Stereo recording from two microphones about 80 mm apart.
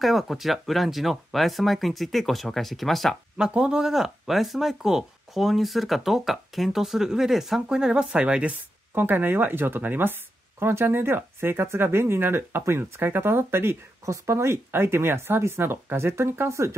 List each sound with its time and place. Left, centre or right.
0.0 s speech: centre
3.3 s speech: centre
8.9 s speech: right